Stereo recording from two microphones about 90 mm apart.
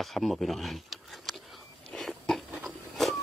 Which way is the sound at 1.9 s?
5° left (ahead or behind).